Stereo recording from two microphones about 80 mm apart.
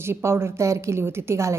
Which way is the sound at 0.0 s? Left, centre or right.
Right.